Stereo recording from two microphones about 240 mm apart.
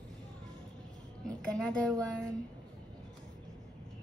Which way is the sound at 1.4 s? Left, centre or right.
Centre.